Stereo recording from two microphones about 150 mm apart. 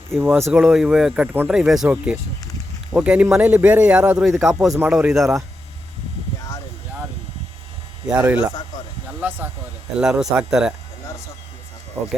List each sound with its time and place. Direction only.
0.2 s a man's voice: 15° right (ahead or behind)
0.6 s a man's voice: 5° right (ahead or behind)
8.0 s a man's voice: 10° right (ahead or behind)
12.0 s speech: 20° right (ahead or behind)